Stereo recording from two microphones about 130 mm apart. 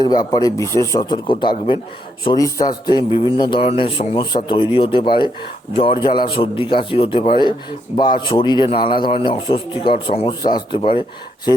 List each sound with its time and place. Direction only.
0.0 s speech: 30° left (ahead or behind)
1.0 s a man's voice: 35° left (ahead or behind)